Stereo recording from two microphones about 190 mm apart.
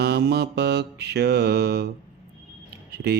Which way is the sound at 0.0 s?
60° right (ahead or behind).